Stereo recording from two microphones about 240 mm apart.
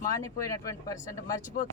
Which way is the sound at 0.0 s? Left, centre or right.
Centre.